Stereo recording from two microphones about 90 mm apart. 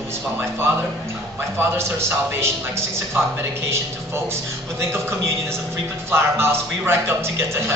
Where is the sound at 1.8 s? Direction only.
30° right (ahead or behind).